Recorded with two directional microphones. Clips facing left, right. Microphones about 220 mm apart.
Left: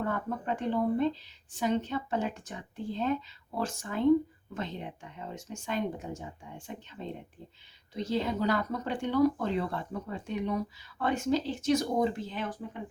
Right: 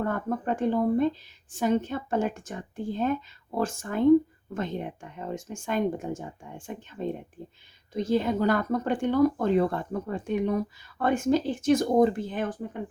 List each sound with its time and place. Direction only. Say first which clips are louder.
0.0 s speech: right 4 dB; 50° right (ahead or behind)